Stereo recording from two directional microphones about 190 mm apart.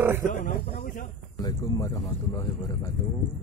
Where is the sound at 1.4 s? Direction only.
15° left (ahead or behind).